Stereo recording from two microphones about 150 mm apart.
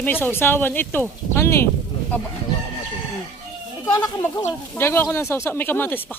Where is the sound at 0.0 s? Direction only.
10° left (ahead or behind).